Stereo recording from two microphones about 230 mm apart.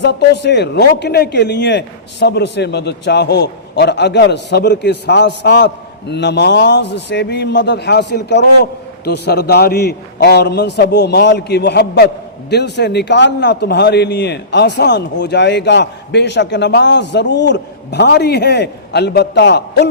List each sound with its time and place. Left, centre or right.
0.0 s a man's voice: left